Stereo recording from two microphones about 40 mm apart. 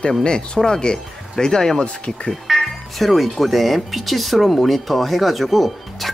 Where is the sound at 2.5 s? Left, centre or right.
Centre.